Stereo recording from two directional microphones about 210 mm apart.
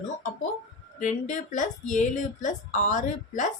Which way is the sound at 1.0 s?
35° left (ahead or behind).